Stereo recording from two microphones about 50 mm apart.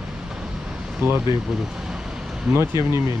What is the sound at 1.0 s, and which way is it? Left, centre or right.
Speech, right.